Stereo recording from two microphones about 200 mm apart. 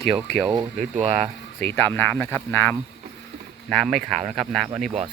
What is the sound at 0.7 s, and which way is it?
Speech, 35° right (ahead or behind).